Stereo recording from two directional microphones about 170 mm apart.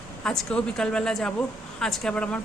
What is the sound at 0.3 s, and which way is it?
A woman's voice, 5° left (ahead or behind).